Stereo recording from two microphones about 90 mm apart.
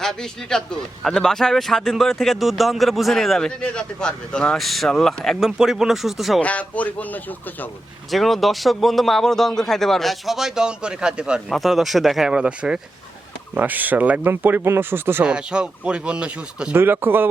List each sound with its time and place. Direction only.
0.0 s a man's voice: 5° left (ahead or behind)
6.4 s speech: 15° left (ahead or behind)
8.1 s a man's voice: centre (ahead or behind); by 15.2 s 25° right (ahead or behind)
15.2 s speech: 10° right (ahead or behind)
16.7 s speech: 25° right (ahead or behind)